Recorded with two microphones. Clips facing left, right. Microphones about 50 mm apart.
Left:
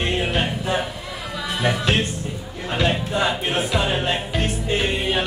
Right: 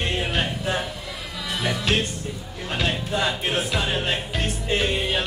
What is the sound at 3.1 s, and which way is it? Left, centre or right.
Music, centre.